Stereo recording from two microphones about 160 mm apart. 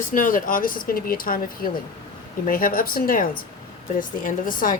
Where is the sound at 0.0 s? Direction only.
60° left (ahead or behind).